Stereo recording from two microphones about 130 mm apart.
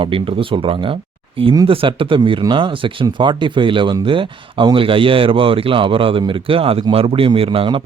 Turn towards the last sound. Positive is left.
turn(degrees=-45)  # may be behind; listen again after turning